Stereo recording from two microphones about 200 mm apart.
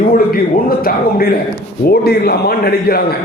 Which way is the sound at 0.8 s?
45° left (ahead or behind).